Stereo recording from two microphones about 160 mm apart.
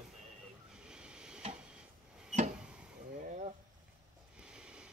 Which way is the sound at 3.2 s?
50° right (ahead or behind).